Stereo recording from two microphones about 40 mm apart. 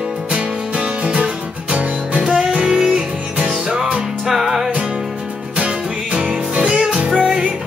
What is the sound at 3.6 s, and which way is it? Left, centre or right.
Music, centre.